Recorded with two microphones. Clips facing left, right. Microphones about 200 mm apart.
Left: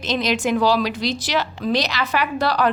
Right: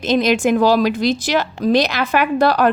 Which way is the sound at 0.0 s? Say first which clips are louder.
Right 6 dB; 50° right (ahead or behind).